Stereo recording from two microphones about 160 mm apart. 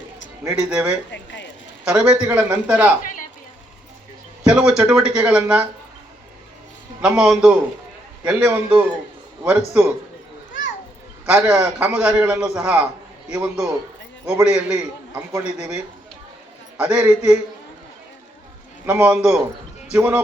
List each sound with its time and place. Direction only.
0.4 s a man's voice: 5° right (ahead or behind)
1.1 s a sound: 90° left
1.8 s a man's voice: 5° right (ahead or behind)
4.4 s a man's voice: 5° right (ahead or behind)
7.0 s a man's voice: 5° right (ahead or behind)
11.3 s a man's voice: 5° right (ahead or behind)
16.7 s a man's voice: 10° right (ahead or behind)
18.9 s a man's voice: 10° right (ahead or behind)